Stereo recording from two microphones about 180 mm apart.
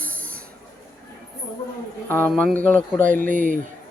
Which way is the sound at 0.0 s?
10° left (ahead or behind).